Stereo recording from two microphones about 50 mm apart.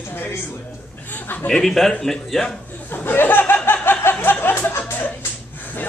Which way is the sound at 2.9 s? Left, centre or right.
Left.